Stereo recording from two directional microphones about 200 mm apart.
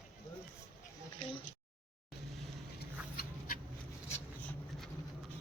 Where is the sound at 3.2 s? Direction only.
45° left (ahead or behind).